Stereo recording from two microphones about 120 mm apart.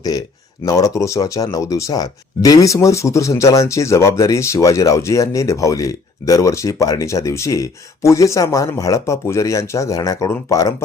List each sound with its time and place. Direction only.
0.0 s speech: 30° left (ahead or behind)